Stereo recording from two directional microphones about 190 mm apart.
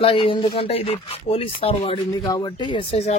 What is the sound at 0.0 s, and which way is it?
A man's voice, 25° left (ahead or behind).